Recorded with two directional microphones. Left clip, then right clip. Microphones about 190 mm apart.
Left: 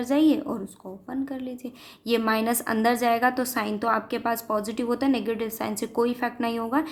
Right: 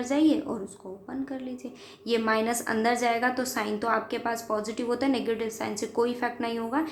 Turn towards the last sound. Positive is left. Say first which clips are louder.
# left 3 dB
turn(degrees=35)  # may be behind; listen again after turning